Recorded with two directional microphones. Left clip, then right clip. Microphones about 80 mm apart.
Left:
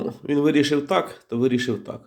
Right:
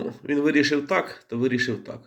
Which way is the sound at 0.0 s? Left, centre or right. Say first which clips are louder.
Left 2 dB; left.